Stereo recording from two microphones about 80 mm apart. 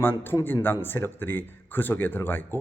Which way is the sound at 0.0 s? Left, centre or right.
Left.